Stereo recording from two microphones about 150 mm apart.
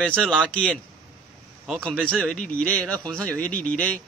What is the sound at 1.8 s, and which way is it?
A man's voice, 5° left (ahead or behind).